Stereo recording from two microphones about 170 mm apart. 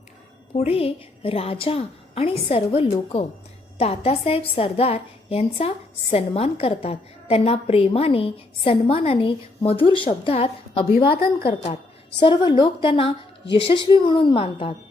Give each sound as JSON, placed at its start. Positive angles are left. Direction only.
{"t": 0.5, "sound": "a woman's voice", "side_deg": 35}
{"t": 10.9, "sound": "a woman's voice", "side_deg": 60}
{"t": 11.4, "sound": "a woman's voice", "side_deg": 40}